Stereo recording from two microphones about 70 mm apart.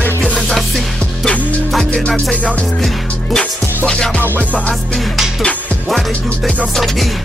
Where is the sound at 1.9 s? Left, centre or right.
Centre.